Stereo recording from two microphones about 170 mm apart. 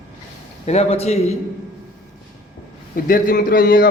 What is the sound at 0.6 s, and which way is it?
Speech, 40° left (ahead or behind).